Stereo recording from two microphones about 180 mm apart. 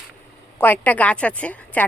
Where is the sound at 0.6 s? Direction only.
10° left (ahead or behind).